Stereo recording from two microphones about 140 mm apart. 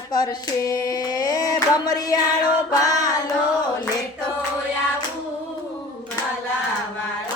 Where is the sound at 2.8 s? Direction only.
25° left (ahead or behind).